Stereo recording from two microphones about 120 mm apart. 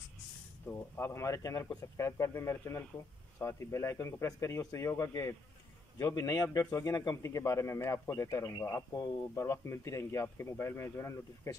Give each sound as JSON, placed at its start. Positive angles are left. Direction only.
{"t": 0.7, "sound": "speech", "side_deg": 20}